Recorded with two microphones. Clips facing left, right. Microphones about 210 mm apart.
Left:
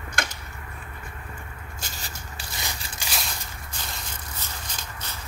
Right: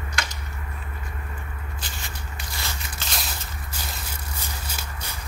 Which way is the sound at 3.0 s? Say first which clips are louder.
Even; 5° left (ahead or behind).